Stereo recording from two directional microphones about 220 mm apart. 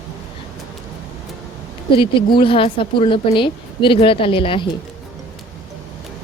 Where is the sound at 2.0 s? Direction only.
25° left (ahead or behind).